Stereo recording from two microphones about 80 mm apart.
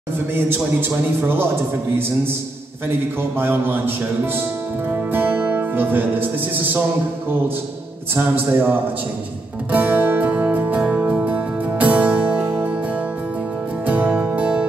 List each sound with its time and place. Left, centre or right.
0.3 s a man's voice: right
3.2 s a man's voice: right
4.4 s music: right
8.1 s a man's voice: right
9.7 s music: right
13.8 s music: right